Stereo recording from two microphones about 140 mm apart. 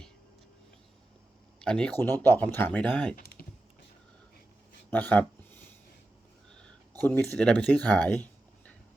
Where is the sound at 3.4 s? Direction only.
90° left.